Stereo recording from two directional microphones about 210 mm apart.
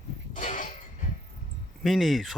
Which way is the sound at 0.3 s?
35° left (ahead or behind).